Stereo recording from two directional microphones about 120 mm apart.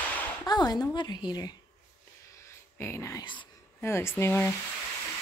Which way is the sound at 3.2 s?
40° left (ahead or behind).